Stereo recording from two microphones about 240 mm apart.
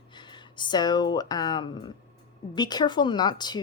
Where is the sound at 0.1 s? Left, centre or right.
Centre.